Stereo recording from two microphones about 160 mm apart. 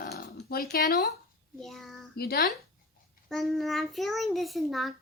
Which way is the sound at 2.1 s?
70° left (ahead or behind).